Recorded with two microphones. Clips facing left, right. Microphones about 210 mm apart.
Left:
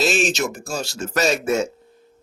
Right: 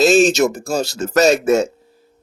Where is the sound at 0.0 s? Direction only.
40° right (ahead or behind).